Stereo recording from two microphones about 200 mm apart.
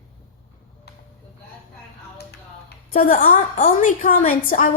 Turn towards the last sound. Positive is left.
turn(degrees=40)  # may be behind; listen again after turning